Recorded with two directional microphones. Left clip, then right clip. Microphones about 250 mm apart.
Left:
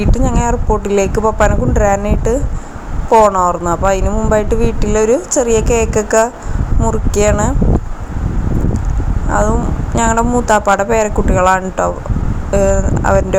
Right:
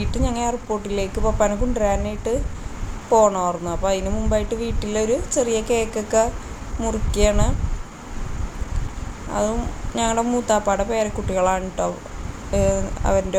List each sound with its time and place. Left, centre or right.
0.1 s speech: centre
9.3 s speech: centre